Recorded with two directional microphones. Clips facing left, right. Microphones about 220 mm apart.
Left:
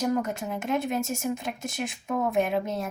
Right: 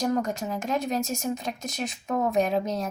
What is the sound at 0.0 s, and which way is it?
Speech, 5° left (ahead or behind).